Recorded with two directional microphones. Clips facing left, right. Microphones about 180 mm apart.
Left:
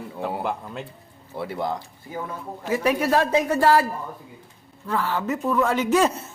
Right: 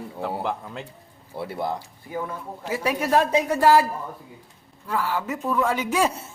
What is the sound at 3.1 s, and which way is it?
Speech, 15° right (ahead or behind).